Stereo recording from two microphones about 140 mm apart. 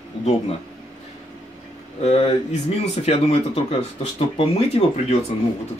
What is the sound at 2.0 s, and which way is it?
Speech, 50° left (ahead or behind).